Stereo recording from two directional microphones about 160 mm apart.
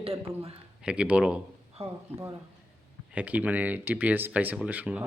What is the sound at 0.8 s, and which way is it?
Speech, 5° right (ahead or behind).